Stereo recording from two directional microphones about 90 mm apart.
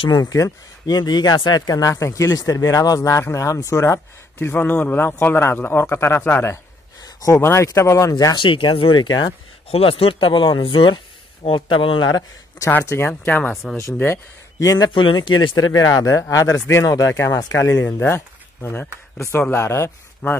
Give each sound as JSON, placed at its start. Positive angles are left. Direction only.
{"t": 0.1, "sound": "speech", "side_deg": 40}
{"t": 1.7, "sound": "a man's voice", "side_deg": 40}
{"t": 7.2, "sound": "speech", "side_deg": 35}
{"t": 8.4, "sound": "speech", "side_deg": 65}
{"t": 9.7, "sound": "speech", "side_deg": 90}
{"t": 12.1, "sound": "speech", "side_deg": 40}
{"t": 12.6, "sound": "a man's voice", "side_deg": 30}
{"t": 14.6, "sound": "speech", "side_deg": 40}
{"t": 14.9, "sound": "speech", "side_deg": 65}
{"t": 15.5, "sound": "speech", "side_deg": 40}
{"t": 17.7, "sound": "a man's voice", "side_deg": 20}